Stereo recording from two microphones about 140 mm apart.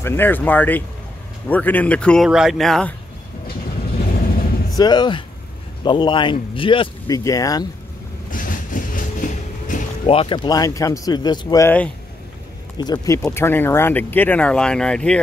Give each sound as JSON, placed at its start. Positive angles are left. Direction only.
{"t": 0.0, "sound": "speech", "side_deg": 15}
{"t": 2.2, "sound": "speech", "side_deg": -5}
{"t": 4.0, "sound": "vehicle", "side_deg": 90}
{"t": 4.6, "sound": "a man's voice", "side_deg": 30}
{"t": 7.1, "sound": "speech", "side_deg": 25}
{"t": 8.3, "sound": "vehicle", "side_deg": 75}
{"t": 10.0, "sound": "speech", "side_deg": 40}
{"t": 12.7, "sound": "speech", "side_deg": 30}
{"t": 13.2, "sound": "speech", "side_deg": 15}